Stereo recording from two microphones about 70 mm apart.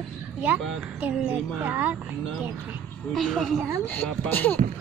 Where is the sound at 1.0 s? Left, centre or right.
Right.